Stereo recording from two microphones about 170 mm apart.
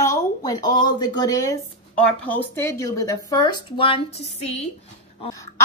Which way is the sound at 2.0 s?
10° left (ahead or behind).